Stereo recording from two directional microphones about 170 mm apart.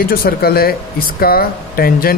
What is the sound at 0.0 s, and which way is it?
Speech, 60° left (ahead or behind).